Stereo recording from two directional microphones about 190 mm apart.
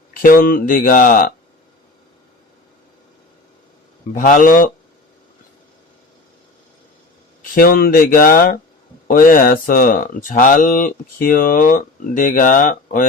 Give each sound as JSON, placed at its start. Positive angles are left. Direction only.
{"t": 0.1, "sound": "speech", "side_deg": 45}
{"t": 4.1, "sound": "speech", "side_deg": 45}
{"t": 7.5, "sound": "speech", "side_deg": 50}